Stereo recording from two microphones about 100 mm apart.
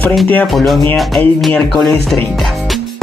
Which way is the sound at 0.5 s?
Centre (ahead or behind).